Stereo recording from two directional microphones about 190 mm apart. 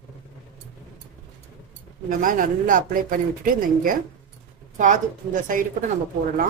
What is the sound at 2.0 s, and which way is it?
Speech, 45° right (ahead or behind).